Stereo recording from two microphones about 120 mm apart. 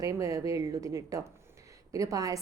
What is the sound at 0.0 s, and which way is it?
A woman's voice, 25° right (ahead or behind).